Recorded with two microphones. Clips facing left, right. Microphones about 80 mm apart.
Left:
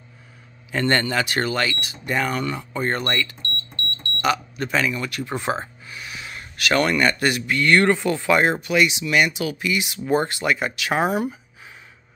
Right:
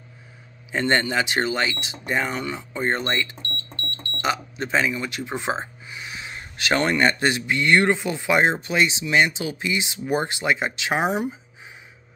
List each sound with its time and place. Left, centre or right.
0.7 s speech: centre